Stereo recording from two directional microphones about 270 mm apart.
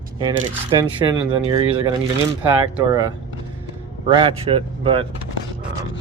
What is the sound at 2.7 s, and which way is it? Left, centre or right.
Speech, centre.